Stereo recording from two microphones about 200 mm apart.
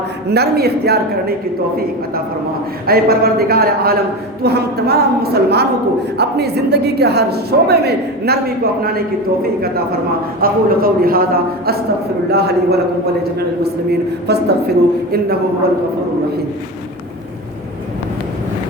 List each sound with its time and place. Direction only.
0.3 s a woman's voice: 55° right (ahead or behind)
14.3 s a woman's voice: 50° right (ahead or behind)